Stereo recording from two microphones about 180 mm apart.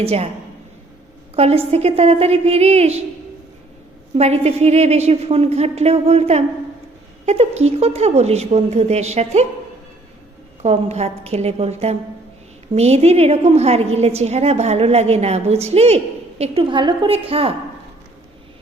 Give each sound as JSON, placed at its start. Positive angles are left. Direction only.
{"t": 0.0, "sound": "a woman's voice", "side_deg": -35}
{"t": 1.4, "sound": "a woman's voice", "side_deg": -35}
{"t": 4.1, "sound": "a woman's voice", "side_deg": -35}
{"t": 10.6, "sound": "a woman's voice", "side_deg": -35}